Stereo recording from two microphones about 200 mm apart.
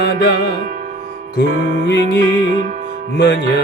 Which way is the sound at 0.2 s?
55° left (ahead or behind).